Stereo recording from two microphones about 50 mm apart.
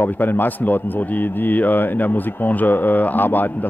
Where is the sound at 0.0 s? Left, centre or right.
Left.